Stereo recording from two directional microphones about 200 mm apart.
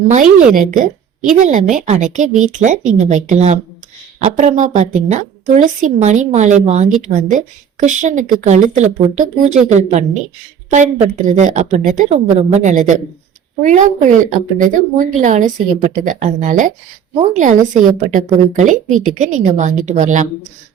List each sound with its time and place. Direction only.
0.5 s a woman's voice: 40° right (ahead or behind)